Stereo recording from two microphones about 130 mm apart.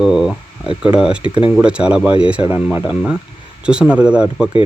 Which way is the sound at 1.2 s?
40° left (ahead or behind).